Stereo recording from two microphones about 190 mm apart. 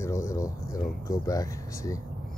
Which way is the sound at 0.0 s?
15° left (ahead or behind).